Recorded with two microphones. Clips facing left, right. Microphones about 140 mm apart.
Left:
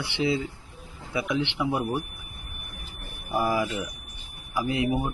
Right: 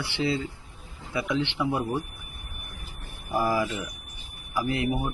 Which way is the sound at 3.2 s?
10° left (ahead or behind).